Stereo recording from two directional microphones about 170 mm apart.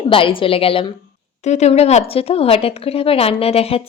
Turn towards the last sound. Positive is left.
turn(degrees=35)  # may be behind; listen again after turning